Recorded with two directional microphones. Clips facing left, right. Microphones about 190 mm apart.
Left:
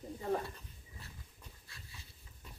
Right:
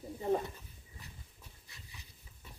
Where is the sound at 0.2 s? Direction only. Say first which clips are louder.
Right 4 dB; 20° right (ahead or behind).